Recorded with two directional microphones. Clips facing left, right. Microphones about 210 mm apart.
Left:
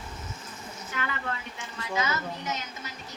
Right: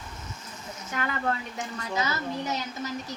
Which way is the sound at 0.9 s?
40° right (ahead or behind).